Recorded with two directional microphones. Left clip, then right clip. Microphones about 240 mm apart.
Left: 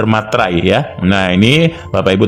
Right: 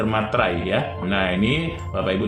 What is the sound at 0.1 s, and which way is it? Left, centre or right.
A man's voice, left.